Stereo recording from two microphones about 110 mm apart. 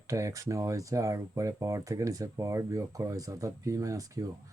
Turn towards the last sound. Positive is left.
turn(degrees=-30)  # may be behind; listen again after turning